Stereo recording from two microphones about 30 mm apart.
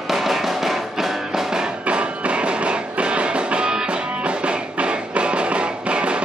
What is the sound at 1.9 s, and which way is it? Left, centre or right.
Music, right.